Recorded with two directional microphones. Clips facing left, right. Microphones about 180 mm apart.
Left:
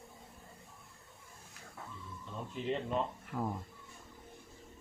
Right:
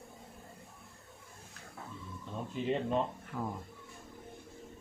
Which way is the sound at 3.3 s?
10° left (ahead or behind).